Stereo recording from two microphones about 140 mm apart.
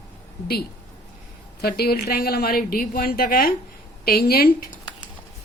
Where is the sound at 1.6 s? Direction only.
90° left.